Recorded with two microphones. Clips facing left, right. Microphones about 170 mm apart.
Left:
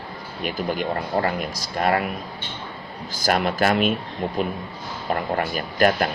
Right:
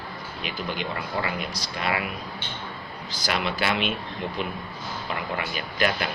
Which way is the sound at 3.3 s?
45° left (ahead or behind).